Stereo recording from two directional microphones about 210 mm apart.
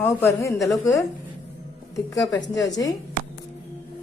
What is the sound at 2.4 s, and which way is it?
Speech, 60° left (ahead or behind).